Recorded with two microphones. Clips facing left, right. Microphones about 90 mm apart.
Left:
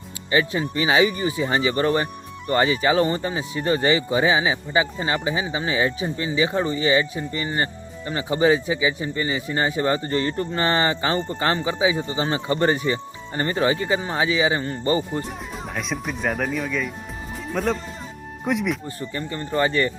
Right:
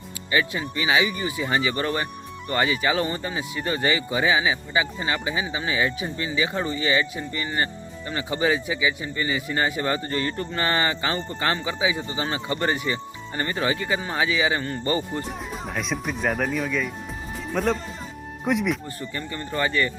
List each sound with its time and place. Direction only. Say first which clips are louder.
0.3 s speech: left 3 dB; 30° left (ahead or behind)
15.2 s speech: even; centre (ahead or behind)
18.9 s speech: left 3 dB; 25° left (ahead or behind)